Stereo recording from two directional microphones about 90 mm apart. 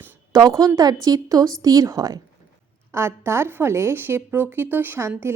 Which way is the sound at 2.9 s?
30° right (ahead or behind).